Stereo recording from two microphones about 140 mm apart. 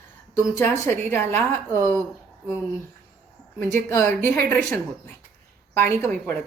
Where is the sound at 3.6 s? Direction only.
15° left (ahead or behind).